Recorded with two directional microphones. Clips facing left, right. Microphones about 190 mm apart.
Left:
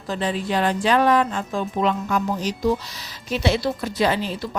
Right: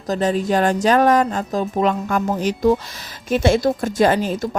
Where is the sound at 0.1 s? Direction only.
45° right (ahead or behind).